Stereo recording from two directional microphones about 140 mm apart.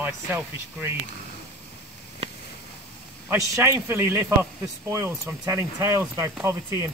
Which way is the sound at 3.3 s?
20° right (ahead or behind).